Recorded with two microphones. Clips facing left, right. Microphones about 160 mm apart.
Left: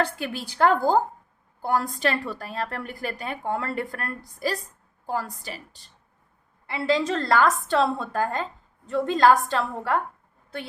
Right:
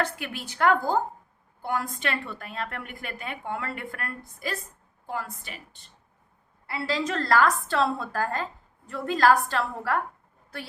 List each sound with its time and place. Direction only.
0.0 s a woman's voice: 30° left (ahead or behind)
6.7 s a woman's voice: 20° left (ahead or behind)